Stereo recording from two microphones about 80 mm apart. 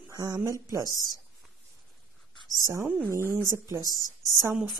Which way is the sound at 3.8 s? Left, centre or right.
Left.